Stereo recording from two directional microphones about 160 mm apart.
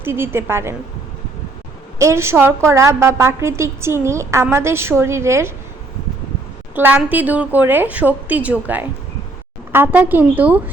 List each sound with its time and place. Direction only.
0.0 s a woman's voice: 15° right (ahead or behind)
2.0 s a woman's voice: 15° right (ahead or behind)
6.7 s a woman's voice: 10° right (ahead or behind)